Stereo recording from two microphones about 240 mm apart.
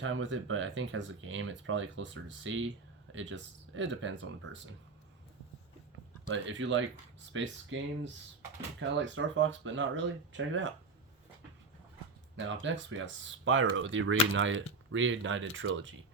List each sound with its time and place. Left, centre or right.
0.0 s speech: right
6.2 s speech: right
12.4 s speech: right